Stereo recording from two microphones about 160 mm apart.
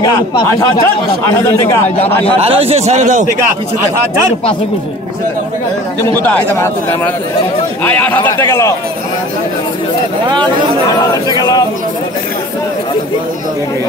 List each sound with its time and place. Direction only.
2.4 s a man's voice: 35° right (ahead or behind)
6.2 s a man's voice: 10° left (ahead or behind)
10.2 s speech: 30° right (ahead or behind)
10.9 s speech: 25° left (ahead or behind)